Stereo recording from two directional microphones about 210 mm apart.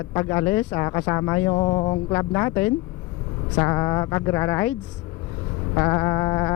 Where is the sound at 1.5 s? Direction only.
25° left (ahead or behind).